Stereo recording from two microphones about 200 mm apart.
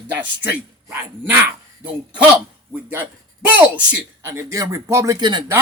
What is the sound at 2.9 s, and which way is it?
Speech, 10° right (ahead or behind).